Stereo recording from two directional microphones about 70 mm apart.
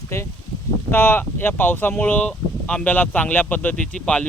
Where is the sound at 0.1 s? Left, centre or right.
Left.